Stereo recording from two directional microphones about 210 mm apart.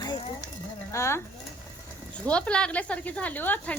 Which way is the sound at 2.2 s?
5° left (ahead or behind).